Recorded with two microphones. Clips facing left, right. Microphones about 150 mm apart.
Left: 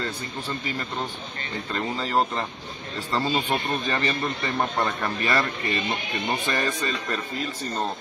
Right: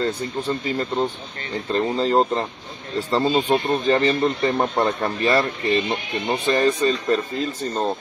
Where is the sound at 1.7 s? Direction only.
30° right (ahead or behind).